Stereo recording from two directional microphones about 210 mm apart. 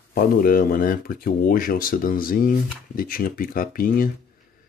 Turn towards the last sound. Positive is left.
turn(degrees=40)  # may be behind; listen again after turning